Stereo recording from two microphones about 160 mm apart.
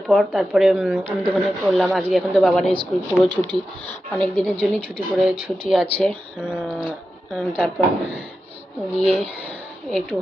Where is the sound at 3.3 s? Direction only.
30° right (ahead or behind).